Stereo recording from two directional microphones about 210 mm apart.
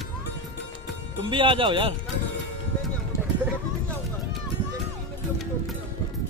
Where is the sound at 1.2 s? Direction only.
25° right (ahead or behind).